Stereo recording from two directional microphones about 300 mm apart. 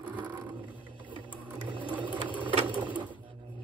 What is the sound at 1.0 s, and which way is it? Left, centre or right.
Sewing machine, centre.